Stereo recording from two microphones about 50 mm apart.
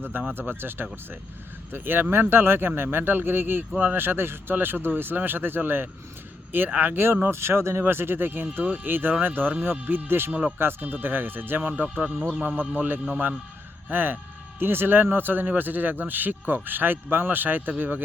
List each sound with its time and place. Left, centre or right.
0.0 s speech: right